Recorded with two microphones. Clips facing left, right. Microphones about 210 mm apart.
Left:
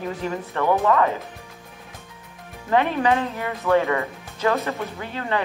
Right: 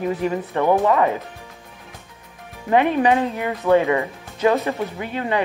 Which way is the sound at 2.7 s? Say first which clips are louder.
Right 3 dB; 15° right (ahead or behind).